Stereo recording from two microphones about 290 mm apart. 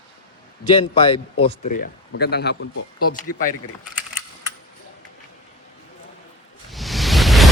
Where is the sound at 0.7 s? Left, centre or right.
Centre; by 3.4 s left.